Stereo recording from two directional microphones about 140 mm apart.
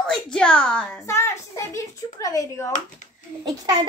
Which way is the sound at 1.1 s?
20° left (ahead or behind).